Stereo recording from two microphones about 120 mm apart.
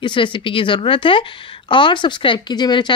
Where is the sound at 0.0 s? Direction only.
45° left (ahead or behind).